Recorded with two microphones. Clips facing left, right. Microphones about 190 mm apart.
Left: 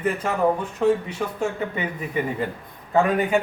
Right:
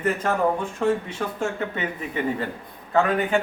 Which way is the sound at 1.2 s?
5° left (ahead or behind).